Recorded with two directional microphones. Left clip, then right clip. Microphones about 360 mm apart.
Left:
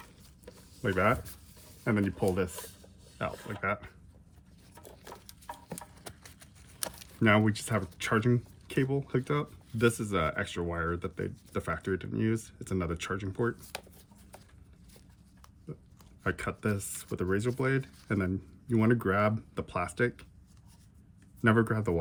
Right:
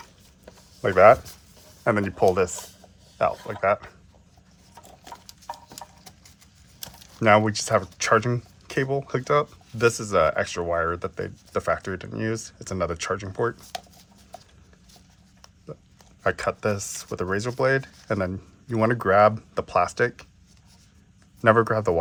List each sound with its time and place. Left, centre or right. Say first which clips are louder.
0.4 s a sound: right 8 dB; centre
1.8 s speech: right 10 dB; centre
7.2 s speech: right 8 dB; centre
16.2 s speech: right 9 dB; centre
21.4 s speech: right 9 dB; centre